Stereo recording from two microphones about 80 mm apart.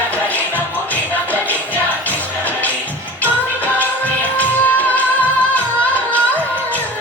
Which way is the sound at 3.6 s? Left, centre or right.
Left.